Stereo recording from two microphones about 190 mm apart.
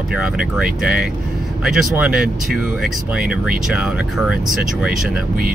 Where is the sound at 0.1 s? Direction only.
5° right (ahead or behind).